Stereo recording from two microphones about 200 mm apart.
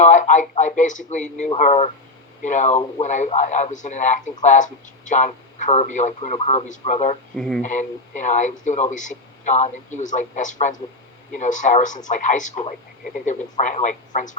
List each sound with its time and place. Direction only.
0.0 s speech: 35° left (ahead or behind)
7.3 s speech: 5° left (ahead or behind)
7.6 s speech: 40° left (ahead or behind)